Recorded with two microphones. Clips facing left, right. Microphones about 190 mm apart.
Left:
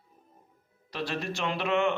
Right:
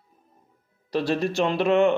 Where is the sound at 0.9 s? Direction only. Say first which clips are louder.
Right 9 dB; 35° right (ahead or behind).